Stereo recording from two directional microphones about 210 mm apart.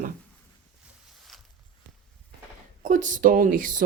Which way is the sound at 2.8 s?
40° right (ahead or behind).